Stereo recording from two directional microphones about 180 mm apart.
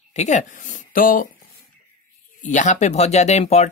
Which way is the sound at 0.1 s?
40° left (ahead or behind).